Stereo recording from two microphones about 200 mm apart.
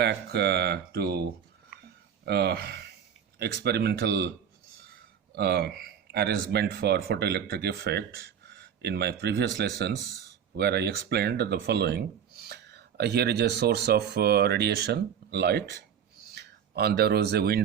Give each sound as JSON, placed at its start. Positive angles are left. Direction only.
{"t": 0.0, "sound": "speech", "side_deg": -55}
{"t": 2.2, "sound": "speech", "side_deg": -55}